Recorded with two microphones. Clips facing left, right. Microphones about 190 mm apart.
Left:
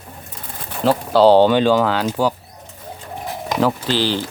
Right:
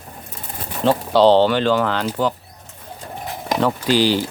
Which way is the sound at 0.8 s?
5° left (ahead or behind).